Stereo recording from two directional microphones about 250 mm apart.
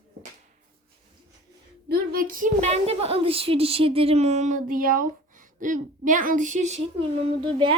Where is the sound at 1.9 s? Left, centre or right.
Right.